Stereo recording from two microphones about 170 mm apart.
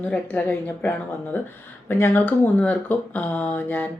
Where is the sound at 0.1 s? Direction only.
10° left (ahead or behind).